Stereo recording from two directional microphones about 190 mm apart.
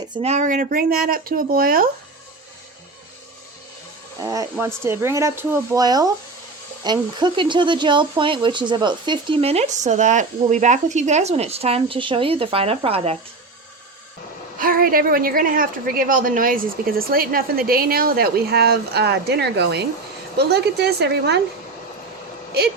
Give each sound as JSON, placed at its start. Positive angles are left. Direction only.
{"t": 0.1, "sound": "a woman's voice", "side_deg": -35}
{"t": 4.2, "sound": "speech", "side_deg": -15}
{"t": 14.6, "sound": "a woman's voice", "side_deg": -50}